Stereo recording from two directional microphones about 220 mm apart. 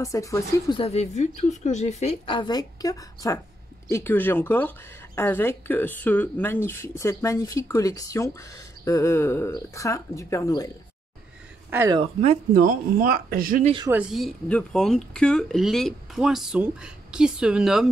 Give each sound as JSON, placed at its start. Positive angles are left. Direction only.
{"t": 0.0, "sound": "speech", "side_deg": 15}
{"t": 11.7, "sound": "speech", "side_deg": -10}
{"t": 12.0, "sound": "speech", "side_deg": -30}
{"t": 13.8, "sound": "speech", "side_deg": -5}